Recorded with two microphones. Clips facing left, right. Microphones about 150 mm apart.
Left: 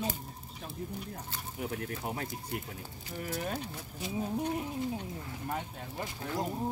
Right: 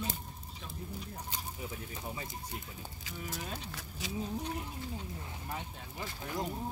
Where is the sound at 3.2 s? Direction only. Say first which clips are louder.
Left 6 dB; 55° left (ahead or behind).